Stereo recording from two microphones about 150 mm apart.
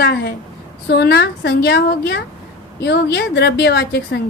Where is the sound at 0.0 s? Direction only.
90° left.